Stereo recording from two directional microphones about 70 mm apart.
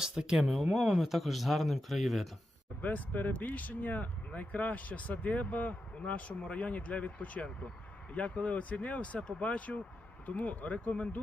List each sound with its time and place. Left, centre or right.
0.0 s speech: centre
2.8 s speech: left